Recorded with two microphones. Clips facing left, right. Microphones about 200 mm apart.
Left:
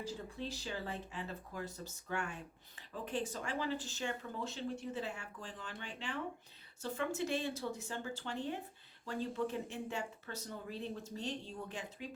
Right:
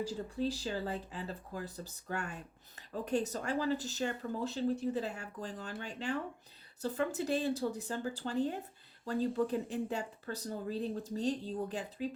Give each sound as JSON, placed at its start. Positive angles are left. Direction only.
{"t": 0.0, "sound": "speech", "side_deg": -35}